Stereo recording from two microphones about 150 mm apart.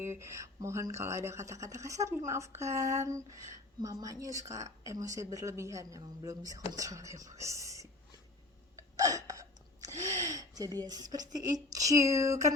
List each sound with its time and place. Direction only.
0.0 s speech: 20° right (ahead or behind)
9.0 s speech: 25° right (ahead or behind)